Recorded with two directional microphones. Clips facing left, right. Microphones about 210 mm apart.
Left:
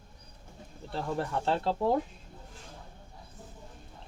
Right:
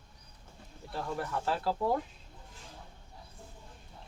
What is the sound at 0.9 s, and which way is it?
Speech, 25° left (ahead or behind).